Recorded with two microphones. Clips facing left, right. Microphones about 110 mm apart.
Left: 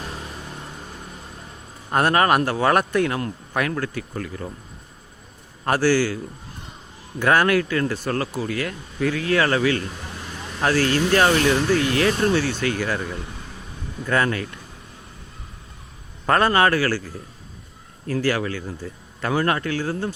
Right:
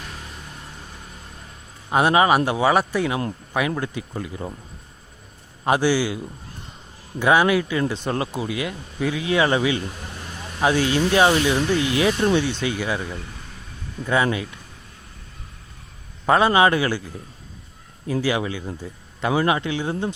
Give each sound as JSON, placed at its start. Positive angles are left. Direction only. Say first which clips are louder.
{"t": 1.9, "sound": "a man's voice", "louder": "right 1 dB", "side_deg": -10}
{"t": 3.7, "sound": "a man's voice", "louder": "even", "side_deg": -20}
{"t": 5.6, "sound": "a man's voice", "louder": "even", "side_deg": -15}
{"t": 7.2, "sound": "a man's voice", "louder": "right 1 dB", "side_deg": -15}
{"t": 16.2, "sound": "a man's voice", "louder": "right 1 dB", "side_deg": -10}